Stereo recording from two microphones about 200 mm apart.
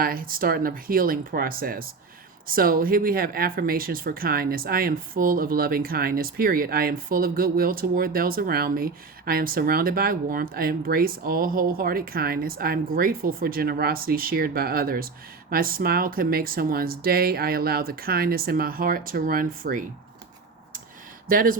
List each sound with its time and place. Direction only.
0.0 s speech: 45° right (ahead or behind)
21.2 s speech: 45° right (ahead or behind)